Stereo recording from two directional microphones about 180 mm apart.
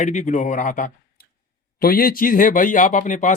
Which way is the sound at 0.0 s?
45° left (ahead or behind).